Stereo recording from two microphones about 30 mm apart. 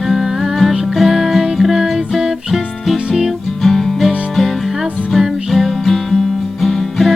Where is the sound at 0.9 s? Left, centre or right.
Centre.